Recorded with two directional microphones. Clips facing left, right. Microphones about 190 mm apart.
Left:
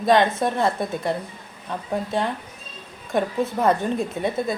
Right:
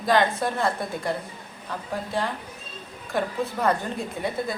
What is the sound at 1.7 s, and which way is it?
Speech, 20° left (ahead or behind).